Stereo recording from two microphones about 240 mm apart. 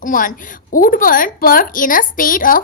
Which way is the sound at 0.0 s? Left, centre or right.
Left.